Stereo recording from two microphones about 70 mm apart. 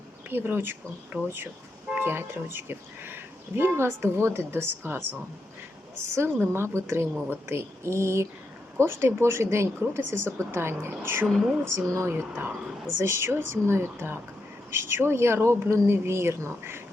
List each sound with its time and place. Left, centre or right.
0.3 s speech: right
6.2 s speech: right